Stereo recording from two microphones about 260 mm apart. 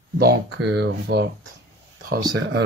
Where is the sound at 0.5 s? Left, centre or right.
Right.